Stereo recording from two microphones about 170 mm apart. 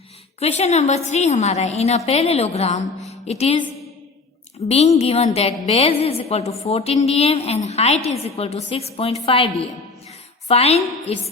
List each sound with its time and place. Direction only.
0.3 s a woman's voice: 40° left (ahead or behind)
4.7 s a woman's voice: 40° left (ahead or behind)
10.5 s a woman's voice: 35° left (ahead or behind)